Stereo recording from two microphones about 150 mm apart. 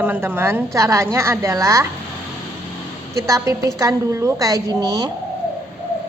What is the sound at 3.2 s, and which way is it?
A woman's voice, 20° right (ahead or behind).